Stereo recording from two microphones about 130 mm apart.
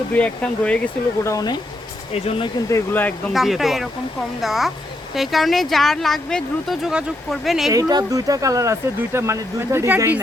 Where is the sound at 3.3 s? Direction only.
Centre (ahead or behind).